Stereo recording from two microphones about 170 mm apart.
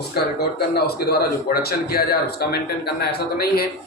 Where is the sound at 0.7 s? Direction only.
70° left (ahead or behind).